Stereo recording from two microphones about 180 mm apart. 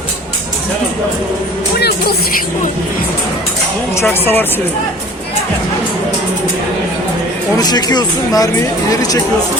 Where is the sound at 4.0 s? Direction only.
10° left (ahead or behind).